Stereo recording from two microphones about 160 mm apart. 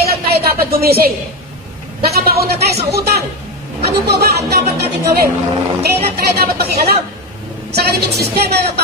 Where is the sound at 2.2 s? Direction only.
75° right (ahead or behind).